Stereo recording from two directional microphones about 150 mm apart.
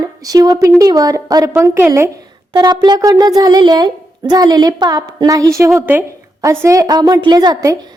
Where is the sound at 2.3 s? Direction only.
30° right (ahead or behind).